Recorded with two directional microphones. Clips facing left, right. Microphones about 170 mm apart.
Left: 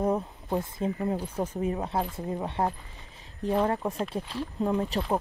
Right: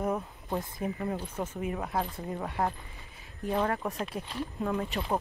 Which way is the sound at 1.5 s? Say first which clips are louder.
Left 2 dB; 30° left (ahead or behind).